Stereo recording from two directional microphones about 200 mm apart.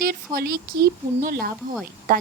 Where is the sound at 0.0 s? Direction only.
50° right (ahead or behind).